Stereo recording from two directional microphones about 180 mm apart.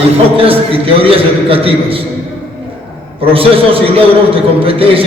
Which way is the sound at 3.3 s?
30° right (ahead or behind).